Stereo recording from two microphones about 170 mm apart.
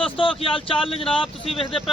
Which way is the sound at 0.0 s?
30° left (ahead or behind).